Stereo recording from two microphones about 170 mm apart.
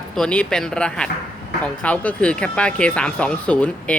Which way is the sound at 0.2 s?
5° left (ahead or behind).